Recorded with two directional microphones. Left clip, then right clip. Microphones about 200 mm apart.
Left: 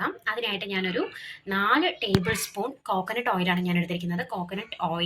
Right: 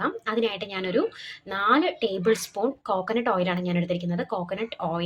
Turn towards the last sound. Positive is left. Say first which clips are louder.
# right 1 dB
turn(degrees=-50)  # may be behind; listen again after turning